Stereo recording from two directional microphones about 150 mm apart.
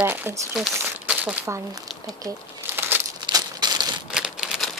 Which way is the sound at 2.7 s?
15° right (ahead or behind).